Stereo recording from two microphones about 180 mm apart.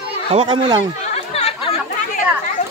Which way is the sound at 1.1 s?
35° left (ahead or behind).